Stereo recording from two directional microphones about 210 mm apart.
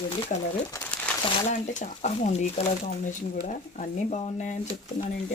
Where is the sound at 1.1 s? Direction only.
5° left (ahead or behind).